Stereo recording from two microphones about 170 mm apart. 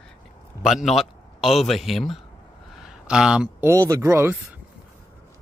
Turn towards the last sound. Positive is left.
turn(degrees=-15)  # may be behind; listen again after turning